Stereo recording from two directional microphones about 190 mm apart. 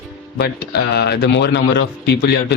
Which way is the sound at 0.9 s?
60° left (ahead or behind).